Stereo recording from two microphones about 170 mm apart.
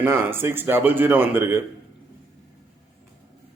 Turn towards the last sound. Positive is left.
turn(degrees=-15)  # may be behind; listen again after turning